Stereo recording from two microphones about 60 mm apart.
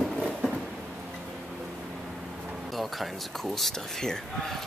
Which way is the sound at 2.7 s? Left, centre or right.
Centre.